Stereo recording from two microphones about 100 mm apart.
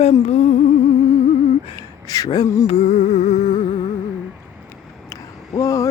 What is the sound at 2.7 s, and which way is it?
Music, 90° left.